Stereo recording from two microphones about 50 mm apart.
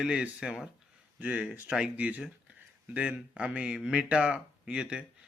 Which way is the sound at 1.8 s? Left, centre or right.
Right.